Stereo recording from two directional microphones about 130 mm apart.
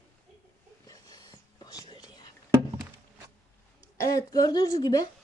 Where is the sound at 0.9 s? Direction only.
30° left (ahead or behind).